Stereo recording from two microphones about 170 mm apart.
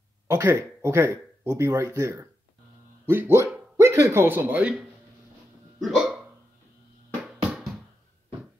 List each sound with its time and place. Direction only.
0.3 s speech: 15° right (ahead or behind)
5.8 s hiccup: centre (ahead or behind)
7.5 s bouncing: centre (ahead or behind)